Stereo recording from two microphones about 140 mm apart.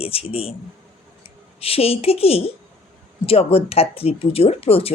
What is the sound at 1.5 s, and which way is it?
Speech, 45° left (ahead or behind).